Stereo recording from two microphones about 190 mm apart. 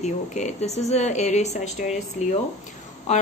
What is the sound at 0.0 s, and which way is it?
A woman's voice, 35° left (ahead or behind).